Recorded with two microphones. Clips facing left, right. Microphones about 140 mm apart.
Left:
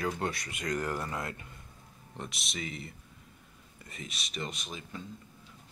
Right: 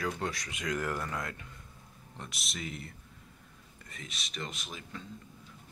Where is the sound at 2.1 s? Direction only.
Centre (ahead or behind).